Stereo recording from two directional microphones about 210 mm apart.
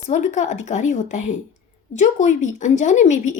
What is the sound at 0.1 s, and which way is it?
A woman's voice, 35° left (ahead or behind).